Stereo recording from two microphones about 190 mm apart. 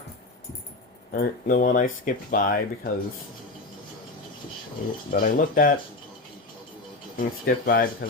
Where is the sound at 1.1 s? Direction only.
50° left (ahead or behind).